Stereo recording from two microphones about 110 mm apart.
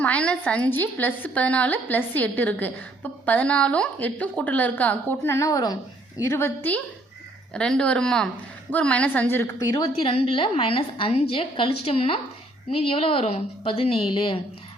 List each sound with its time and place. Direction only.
0.0 s a woman's voice: 10° left (ahead or behind); by 5.7 s 35° left (ahead or behind)
6.2 s a woman's voice: 20° left (ahead or behind)
10.0 s a woman's voice: 55° left (ahead or behind)